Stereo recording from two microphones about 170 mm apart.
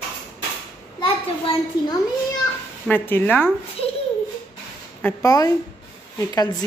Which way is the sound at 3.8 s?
35° left (ahead or behind).